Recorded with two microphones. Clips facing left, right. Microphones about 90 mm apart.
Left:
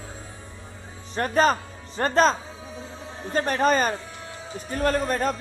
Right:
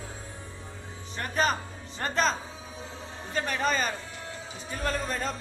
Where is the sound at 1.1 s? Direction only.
40° left (ahead or behind).